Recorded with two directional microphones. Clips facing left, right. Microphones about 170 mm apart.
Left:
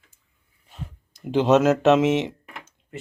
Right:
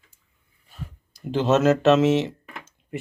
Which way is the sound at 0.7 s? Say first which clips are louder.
Left 1 dB; 20° left (ahead or behind).